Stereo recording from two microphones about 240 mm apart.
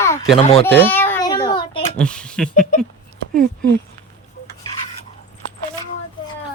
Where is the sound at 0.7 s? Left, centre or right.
Centre.